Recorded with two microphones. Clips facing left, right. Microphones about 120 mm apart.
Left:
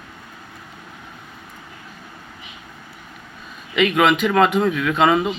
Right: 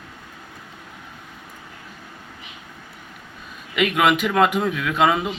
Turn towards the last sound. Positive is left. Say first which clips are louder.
# left 3 dB
turn(degrees=-5)  # may be behind; listen again after turning